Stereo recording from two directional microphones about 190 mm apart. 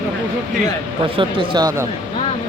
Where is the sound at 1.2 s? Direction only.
25° right (ahead or behind).